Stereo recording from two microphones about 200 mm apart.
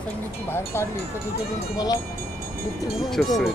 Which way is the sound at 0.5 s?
15° left (ahead or behind).